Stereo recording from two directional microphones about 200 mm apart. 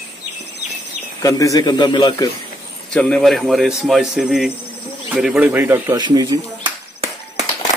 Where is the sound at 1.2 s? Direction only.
15° left (ahead or behind).